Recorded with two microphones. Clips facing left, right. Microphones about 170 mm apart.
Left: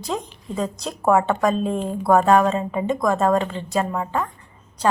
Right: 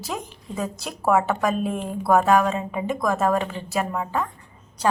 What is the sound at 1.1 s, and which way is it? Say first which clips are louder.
Speech: left 3 dB; 5° right (ahead or behind).